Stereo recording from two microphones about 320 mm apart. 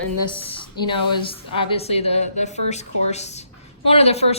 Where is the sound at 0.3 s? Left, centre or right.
Centre.